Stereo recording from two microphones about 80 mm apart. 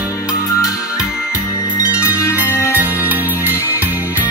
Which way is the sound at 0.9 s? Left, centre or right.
Centre.